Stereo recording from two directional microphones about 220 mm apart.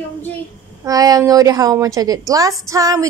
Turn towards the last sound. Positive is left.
turn(degrees=-15)  # may be behind; listen again after turning